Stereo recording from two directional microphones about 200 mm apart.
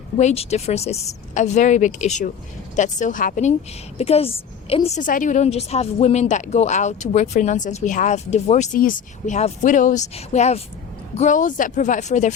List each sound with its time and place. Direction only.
0.2 s a woman's voice: 35° left (ahead or behind)